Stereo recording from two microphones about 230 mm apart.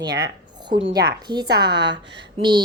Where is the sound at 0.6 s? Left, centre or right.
Centre.